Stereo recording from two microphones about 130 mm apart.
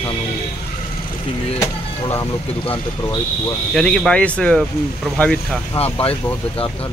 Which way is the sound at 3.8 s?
5° left (ahead or behind).